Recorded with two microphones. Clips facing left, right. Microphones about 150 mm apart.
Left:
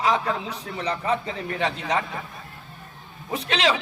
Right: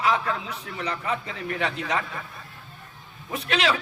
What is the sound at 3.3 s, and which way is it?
Speech, 30° left (ahead or behind).